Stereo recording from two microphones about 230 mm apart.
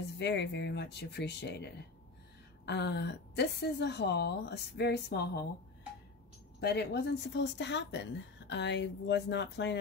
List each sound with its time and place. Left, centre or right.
0.2 s speech: left
6.6 s speech: left